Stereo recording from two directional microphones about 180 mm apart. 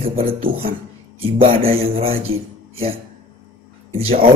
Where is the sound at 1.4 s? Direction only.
30° right (ahead or behind).